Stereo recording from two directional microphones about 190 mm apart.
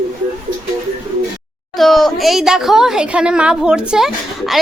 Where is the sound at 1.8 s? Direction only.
Centre (ahead or behind).